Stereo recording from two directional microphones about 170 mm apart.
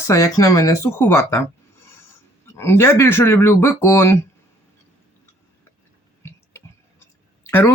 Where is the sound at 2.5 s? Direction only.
15° left (ahead or behind).